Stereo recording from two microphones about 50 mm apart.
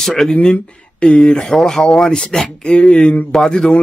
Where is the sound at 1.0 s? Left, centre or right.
Left.